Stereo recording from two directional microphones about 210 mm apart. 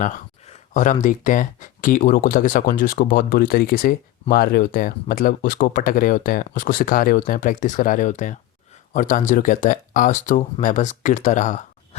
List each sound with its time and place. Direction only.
0.0 s speech: 35° left (ahead or behind)